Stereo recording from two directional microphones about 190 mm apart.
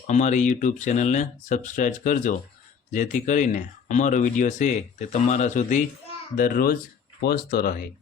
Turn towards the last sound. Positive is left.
turn(degrees=55)  # may be behind; listen again after turning